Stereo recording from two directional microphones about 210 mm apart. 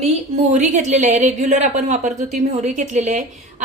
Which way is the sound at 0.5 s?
35° right (ahead or behind).